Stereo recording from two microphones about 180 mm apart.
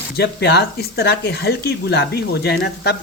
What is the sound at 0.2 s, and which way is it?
Speech, 65° left (ahead or behind).